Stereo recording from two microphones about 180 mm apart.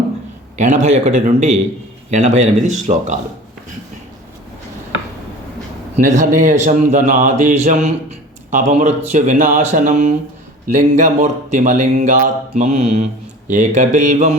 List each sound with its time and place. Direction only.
0.5 s a man's voice: 40° right (ahead or behind)
6.0 s speech: 45° right (ahead or behind)